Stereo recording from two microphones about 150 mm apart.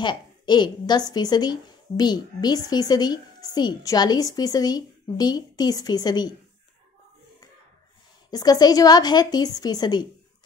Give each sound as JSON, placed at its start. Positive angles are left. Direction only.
{"t": 0.0, "sound": "speech", "side_deg": 30}
{"t": 8.3, "sound": "speech", "side_deg": 25}